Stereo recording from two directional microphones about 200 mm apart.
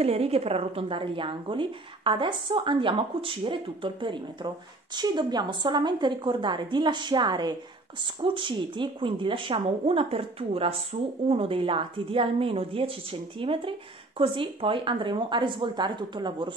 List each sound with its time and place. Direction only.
0.0 s speech: 30° right (ahead or behind)